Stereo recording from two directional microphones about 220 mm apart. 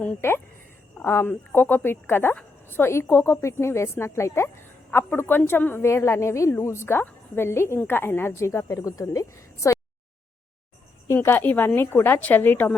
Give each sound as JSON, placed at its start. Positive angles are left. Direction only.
{"t": 0.0, "sound": "a woman's voice", "side_deg": 10}
{"t": 11.1, "sound": "a woman's voice", "side_deg": 10}